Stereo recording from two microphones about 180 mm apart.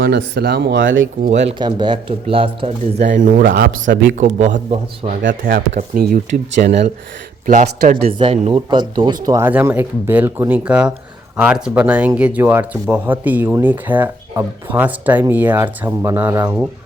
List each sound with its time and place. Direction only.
0.1 s speech: 65° right (ahead or behind)
1.2 s a man's voice: 40° right (ahead or behind)
1.5 s speech: 25° right (ahead or behind)
3.2 s speech: 50° right (ahead or behind); by 4.4 s 75° right (ahead or behind)
4.4 s a man's voice: 40° right (ahead or behind)
6.6 s speech: 60° right (ahead or behind)
7.4 s speech: 45° right (ahead or behind)
8.4 s speech: 35° right (ahead or behind); by 16.6 s 10° right (ahead or behind)